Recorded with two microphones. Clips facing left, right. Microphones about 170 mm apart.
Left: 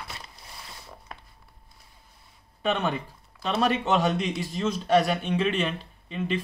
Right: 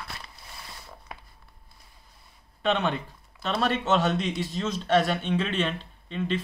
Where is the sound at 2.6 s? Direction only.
10° left (ahead or behind).